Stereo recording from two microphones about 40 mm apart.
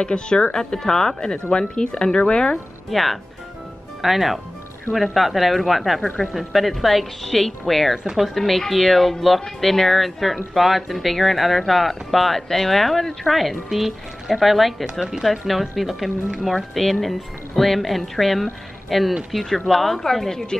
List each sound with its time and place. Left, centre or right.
0.0 s speech: left
2.9 s speech: centre
8.0 s speech: centre
8.4 s speech: centre
15.0 s speech: centre
15.4 s speech: centre